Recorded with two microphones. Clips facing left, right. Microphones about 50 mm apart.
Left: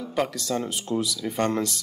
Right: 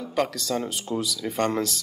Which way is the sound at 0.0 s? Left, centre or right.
Centre.